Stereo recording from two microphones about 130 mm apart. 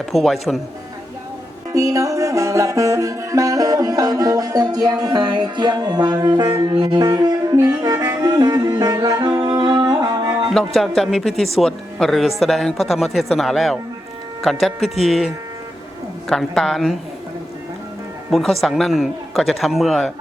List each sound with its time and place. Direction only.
0.0 s speech: centre (ahead or behind)
1.7 s music: 25° right (ahead or behind)
10.8 s speech: 5° left (ahead or behind)
16.3 s speech: 5° left (ahead or behind)
18.3 s speech: centre (ahead or behind)